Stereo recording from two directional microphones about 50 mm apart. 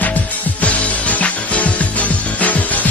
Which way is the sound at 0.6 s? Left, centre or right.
Left.